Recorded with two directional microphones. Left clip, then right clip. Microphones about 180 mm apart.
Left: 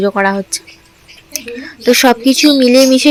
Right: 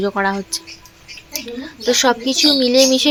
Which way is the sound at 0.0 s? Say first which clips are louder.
Left 6 dB; 20° left (ahead or behind).